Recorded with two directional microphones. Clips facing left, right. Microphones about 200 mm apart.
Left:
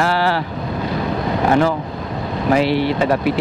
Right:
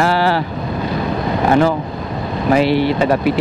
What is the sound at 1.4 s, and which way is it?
Speech, 15° right (ahead or behind).